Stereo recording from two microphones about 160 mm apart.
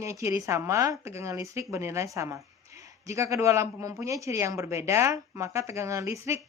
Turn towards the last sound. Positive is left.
turn(degrees=-20)  # may be behind; listen again after turning